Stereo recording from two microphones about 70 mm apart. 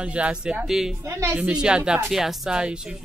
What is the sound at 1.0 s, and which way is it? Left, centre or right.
Speech, right.